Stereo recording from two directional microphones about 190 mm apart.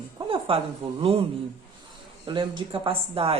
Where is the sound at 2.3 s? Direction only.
25° right (ahead or behind).